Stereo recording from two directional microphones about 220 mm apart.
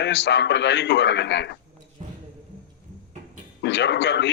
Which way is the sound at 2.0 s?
30° right (ahead or behind).